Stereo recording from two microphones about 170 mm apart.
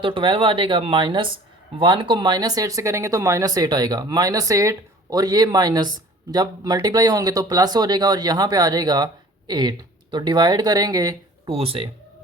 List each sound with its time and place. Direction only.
0.0 s speech: 30° right (ahead or behind)